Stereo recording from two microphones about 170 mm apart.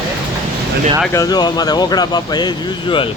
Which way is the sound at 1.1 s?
20° left (ahead or behind).